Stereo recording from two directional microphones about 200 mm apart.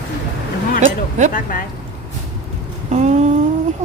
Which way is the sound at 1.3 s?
45° left (ahead or behind).